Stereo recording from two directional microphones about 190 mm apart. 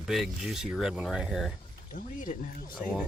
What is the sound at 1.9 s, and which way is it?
Speech, 45° left (ahead or behind).